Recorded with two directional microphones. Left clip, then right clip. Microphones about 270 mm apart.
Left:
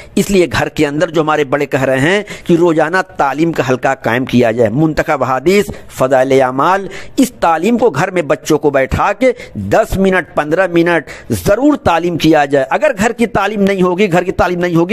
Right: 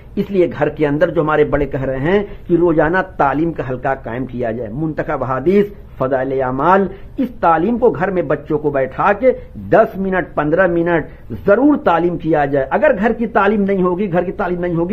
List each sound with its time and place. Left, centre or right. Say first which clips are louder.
0.1 s speech: left 4 dB; left